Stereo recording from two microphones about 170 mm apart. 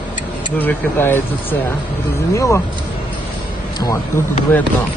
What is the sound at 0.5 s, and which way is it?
Speech, 10° left (ahead or behind).